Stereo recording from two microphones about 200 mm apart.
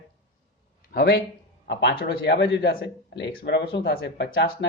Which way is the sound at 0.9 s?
55° left (ahead or behind).